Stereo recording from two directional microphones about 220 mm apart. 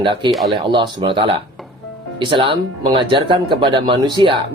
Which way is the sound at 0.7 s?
20° right (ahead or behind).